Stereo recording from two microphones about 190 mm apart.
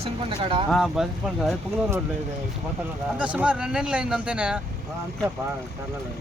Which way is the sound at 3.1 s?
5° right (ahead or behind).